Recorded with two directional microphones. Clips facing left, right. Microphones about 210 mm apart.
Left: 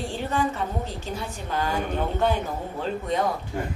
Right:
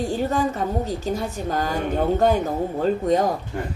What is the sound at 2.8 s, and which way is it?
Speech, 40° right (ahead or behind).